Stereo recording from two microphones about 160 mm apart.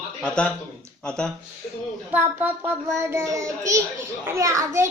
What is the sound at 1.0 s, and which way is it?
Speech, 5° left (ahead or behind).